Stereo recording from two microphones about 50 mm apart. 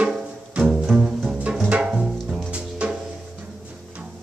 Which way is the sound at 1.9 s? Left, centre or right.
Centre.